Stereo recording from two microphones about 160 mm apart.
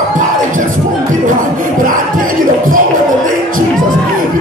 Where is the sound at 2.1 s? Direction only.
60° right (ahead or behind).